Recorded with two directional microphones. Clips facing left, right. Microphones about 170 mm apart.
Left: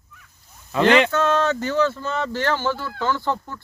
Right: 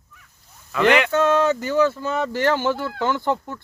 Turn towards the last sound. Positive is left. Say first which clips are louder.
# right 1 dB
turn(degrees=-20)  # may be behind; listen again after turning